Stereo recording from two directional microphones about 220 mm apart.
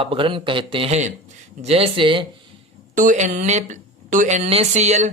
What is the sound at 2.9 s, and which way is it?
A woman's voice, 35° right (ahead or behind).